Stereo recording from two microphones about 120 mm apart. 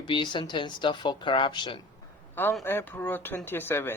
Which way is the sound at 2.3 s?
15° left (ahead or behind).